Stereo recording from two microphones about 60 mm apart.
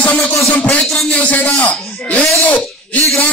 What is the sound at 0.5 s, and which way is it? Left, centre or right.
A man's voice, left.